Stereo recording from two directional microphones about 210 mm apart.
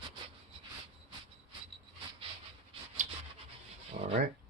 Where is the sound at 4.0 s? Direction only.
30° right (ahead or behind).